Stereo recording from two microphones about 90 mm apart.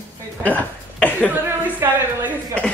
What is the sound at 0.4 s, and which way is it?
Speech, 20° left (ahead or behind).